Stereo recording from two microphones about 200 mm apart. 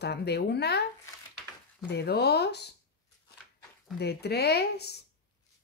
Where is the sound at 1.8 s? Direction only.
55° left (ahead or behind).